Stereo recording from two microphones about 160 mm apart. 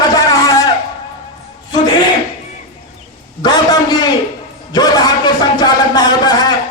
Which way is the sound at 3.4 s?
25° left (ahead or behind).